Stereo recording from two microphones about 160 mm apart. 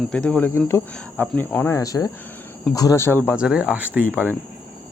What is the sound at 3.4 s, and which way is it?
Speech, 5° right (ahead or behind).